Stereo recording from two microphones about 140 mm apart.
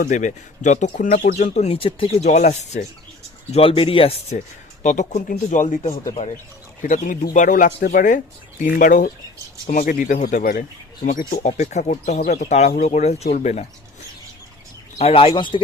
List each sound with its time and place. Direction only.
0.0 s speech: 60° left (ahead or behind)
3.5 s speech: 40° left (ahead or behind)
4.8 s speech: 65° left (ahead or behind); by 10.6 s 85° left
11.0 s speech: 70° left (ahead or behind); by 13.7 s 55° left (ahead or behind)
14.9 s speech: 45° left (ahead or behind)